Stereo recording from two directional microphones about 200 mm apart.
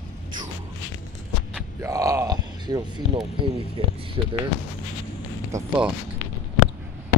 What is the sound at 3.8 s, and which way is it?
Speech, 25° right (ahead or behind).